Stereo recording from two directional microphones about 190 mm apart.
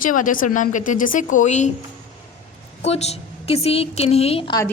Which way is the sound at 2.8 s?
35° left (ahead or behind).